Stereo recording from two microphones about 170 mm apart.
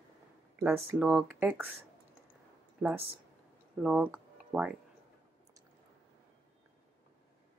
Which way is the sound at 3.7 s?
5° right (ahead or behind).